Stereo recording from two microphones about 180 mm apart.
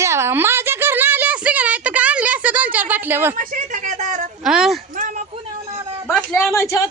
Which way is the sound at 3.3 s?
45° right (ahead or behind).